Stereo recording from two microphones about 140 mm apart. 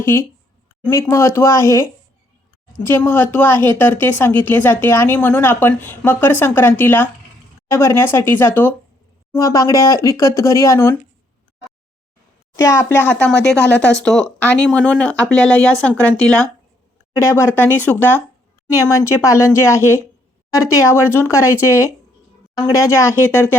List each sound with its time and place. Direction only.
0.0 s speech: 20° left (ahead or behind)
12.5 s speech: 20° left (ahead or behind)